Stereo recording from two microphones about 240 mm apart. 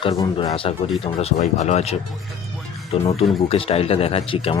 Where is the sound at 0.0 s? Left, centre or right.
Left.